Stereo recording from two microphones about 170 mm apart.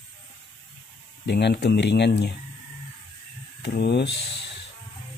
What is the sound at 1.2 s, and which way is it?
Speech, 80° left.